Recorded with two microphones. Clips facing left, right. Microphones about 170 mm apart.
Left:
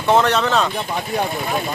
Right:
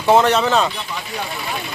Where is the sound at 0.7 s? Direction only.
50° left (ahead or behind).